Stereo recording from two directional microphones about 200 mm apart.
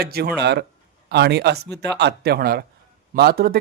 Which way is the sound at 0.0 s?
50° right (ahead or behind).